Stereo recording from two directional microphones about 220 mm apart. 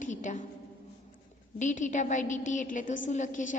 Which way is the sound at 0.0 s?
35° left (ahead or behind).